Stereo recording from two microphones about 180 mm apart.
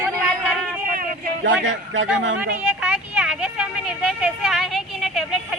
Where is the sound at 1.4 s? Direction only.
90° right.